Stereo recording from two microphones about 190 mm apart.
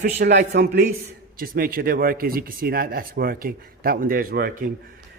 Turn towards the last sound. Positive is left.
turn(degrees=-50)  # may be behind; listen again after turning